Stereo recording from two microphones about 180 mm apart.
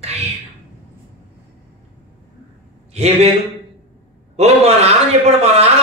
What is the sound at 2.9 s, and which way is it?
Speech, 35° right (ahead or behind).